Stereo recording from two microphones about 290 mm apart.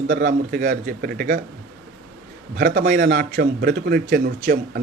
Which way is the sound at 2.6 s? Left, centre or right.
Right.